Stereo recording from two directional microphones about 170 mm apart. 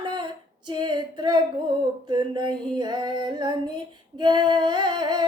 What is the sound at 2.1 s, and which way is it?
Female singing, 25° right (ahead or behind).